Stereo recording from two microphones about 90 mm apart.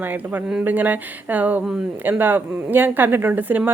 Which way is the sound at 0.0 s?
20° right (ahead or behind).